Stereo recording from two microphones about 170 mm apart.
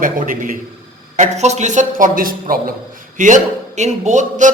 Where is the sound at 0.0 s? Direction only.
50° right (ahead or behind).